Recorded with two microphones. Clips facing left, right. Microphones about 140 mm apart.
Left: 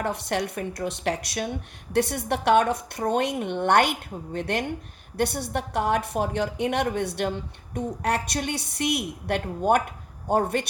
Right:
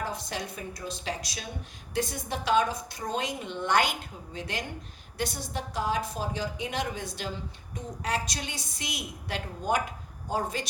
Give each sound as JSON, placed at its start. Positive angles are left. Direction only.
{"t": 0.0, "sound": "a woman's voice", "side_deg": 65}